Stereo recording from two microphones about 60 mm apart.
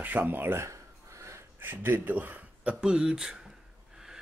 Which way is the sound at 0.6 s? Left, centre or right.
Right.